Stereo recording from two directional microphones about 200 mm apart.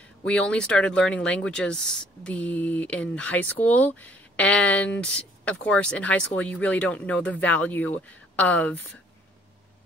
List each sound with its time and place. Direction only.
0.2 s speech: 5° left (ahead or behind)